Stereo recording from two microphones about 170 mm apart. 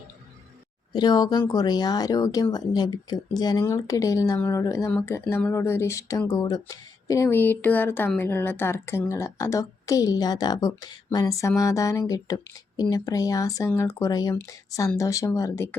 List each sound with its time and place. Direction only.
0.9 s a woman's voice: 25° left (ahead or behind)